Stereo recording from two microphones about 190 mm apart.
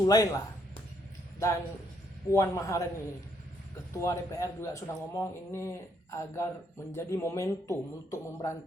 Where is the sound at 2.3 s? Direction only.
15° left (ahead or behind).